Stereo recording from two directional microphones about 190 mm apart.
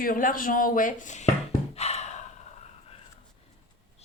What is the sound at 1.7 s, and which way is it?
Gasp, 35° left (ahead or behind).